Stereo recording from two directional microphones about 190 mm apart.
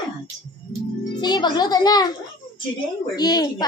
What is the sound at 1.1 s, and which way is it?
Speech, 20° left (ahead or behind).